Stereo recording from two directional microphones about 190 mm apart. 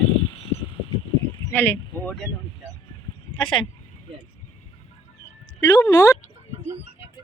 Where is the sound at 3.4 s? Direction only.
25° left (ahead or behind).